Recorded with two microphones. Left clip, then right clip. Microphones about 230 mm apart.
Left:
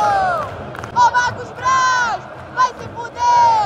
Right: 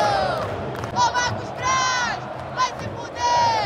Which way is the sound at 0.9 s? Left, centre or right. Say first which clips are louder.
Left 7 dB; centre.